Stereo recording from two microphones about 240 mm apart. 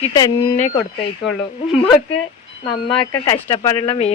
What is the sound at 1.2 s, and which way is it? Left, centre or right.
Speech, centre.